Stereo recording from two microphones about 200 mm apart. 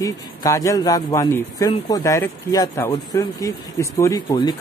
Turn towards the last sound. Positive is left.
turn(degrees=20)  # may be behind; listen again after turning